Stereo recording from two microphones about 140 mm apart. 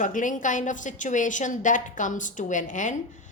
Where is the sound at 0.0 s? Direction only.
70° left (ahead or behind).